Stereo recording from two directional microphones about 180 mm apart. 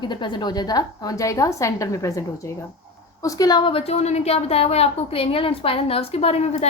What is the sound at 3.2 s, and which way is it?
A woman's voice, 20° left (ahead or behind).